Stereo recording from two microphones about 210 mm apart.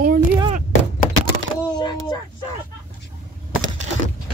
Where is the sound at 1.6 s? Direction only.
20° left (ahead or behind).